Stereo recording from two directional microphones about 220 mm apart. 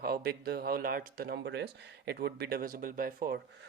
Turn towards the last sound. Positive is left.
turn(degrees=-40)  # may be behind; listen again after turning